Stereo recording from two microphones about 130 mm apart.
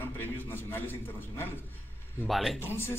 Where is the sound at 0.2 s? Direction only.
15° left (ahead or behind).